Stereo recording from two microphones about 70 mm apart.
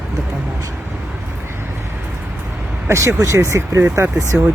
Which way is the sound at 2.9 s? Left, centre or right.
Right.